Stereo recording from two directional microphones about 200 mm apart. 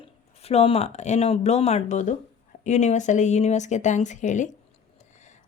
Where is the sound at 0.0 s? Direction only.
30° left (ahead or behind).